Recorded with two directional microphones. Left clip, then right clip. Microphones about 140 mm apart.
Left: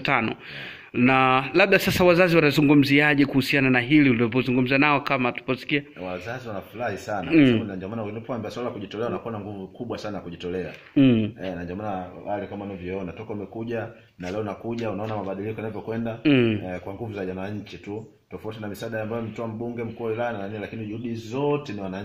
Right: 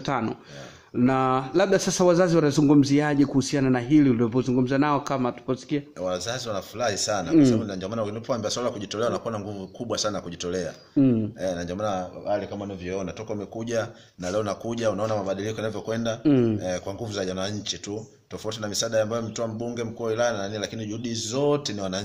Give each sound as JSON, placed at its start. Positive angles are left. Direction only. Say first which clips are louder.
{"t": 0.0, "sound": "a man's voice", "louder": "left 4 dB", "side_deg": -15}
{"t": 1.8, "sound": "a man's voice", "louder": "left 2 dB", "side_deg": 15}
{"t": 2.0, "sound": "a man's voice", "louder": "left 2 dB", "side_deg": -10}
{"t": 6.2, "sound": "speech", "louder": "right 3 dB", "side_deg": -35}
{"t": 7.2, "sound": "a man's voice", "louder": "left 2 dB", "side_deg": -15}
{"t": 7.6, "sound": "speech", "louder": "right 3 dB", "side_deg": -30}
{"t": 11.0, "sound": "a man's voice", "louder": "left 3 dB", "side_deg": 10}
{"t": 11.5, "sound": "a man's voice", "louder": "right 3 dB", "side_deg": -35}
{"t": 14.3, "sound": "a man's voice", "louder": "right 3 dB", "side_deg": -30}
{"t": 18.6, "sound": "a man's voice", "louder": "right 8 dB", "side_deg": -20}
{"t": 21.1, "sound": "speech", "louder": "right 2 dB", "side_deg": -30}